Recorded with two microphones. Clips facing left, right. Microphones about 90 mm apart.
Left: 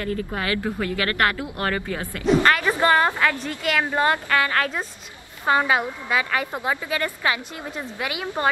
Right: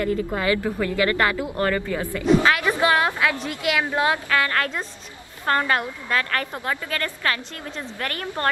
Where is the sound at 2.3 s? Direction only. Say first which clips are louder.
Even; centre (ahead or behind).